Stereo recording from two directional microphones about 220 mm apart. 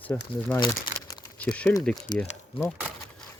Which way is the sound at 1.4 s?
5° left (ahead or behind).